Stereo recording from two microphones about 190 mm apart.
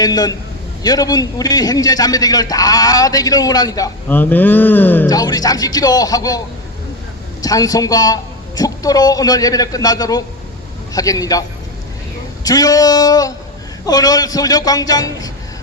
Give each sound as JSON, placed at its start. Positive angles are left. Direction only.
{"t": 0.0, "sound": "a man's voice", "side_deg": 20}
{"t": 7.4, "sound": "a man's voice", "side_deg": 20}
{"t": 12.5, "sound": "a man's voice", "side_deg": 20}